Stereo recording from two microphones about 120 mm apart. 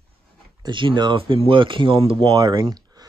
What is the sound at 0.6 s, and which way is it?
Speech, 40° right (ahead or behind).